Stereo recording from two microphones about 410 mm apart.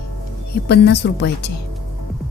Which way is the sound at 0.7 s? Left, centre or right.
Left.